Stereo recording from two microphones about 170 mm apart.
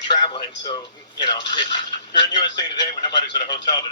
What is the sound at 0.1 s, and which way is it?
Speech, 25° left (ahead or behind).